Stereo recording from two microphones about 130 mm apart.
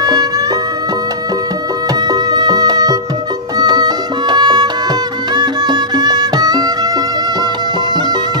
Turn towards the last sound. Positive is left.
turn(degrees=-30)  # may be behind; listen again after turning